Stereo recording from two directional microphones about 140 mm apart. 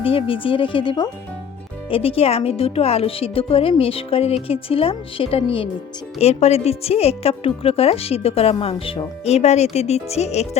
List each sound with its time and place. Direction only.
0.0 s a woman's voice: 40° left (ahead or behind)
9.2 s a woman's voice: 50° left (ahead or behind)